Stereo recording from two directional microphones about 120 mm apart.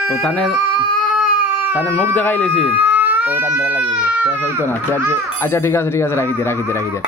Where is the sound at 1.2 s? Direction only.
15° right (ahead or behind).